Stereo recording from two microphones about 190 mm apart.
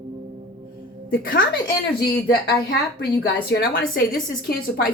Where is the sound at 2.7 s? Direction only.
60° left (ahead or behind).